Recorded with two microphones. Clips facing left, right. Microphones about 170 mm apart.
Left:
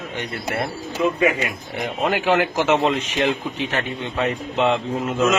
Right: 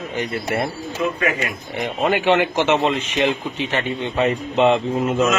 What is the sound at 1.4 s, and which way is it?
A man's voice, centre (ahead or behind).